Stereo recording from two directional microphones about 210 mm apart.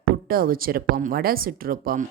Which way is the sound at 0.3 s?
45° right (ahead or behind).